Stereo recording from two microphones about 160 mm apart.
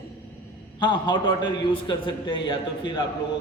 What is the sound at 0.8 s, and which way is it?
A man's voice, 30° left (ahead or behind).